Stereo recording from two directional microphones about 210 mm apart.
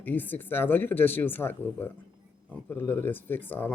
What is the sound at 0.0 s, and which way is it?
Speech, 10° left (ahead or behind).